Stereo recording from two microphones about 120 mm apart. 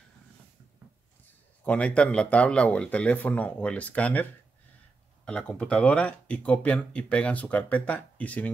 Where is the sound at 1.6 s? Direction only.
10° left (ahead or behind).